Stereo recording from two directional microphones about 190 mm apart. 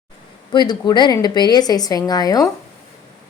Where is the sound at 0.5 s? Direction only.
20° left (ahead or behind).